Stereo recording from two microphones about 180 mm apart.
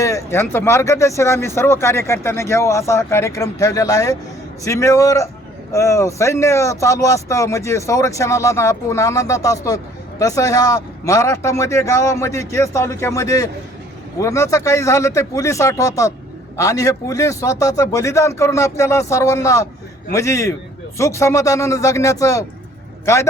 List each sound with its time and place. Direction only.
0.0 s speech: 15° left (ahead or behind)